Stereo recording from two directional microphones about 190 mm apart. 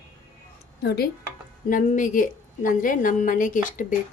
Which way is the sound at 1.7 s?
45° left (ahead or behind).